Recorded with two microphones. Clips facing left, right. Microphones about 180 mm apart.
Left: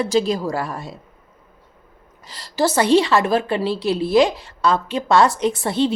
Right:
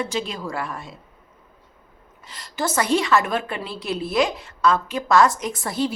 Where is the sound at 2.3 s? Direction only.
35° left (ahead or behind).